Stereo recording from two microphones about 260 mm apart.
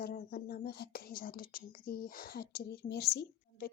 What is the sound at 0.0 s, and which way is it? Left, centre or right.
Speech, left.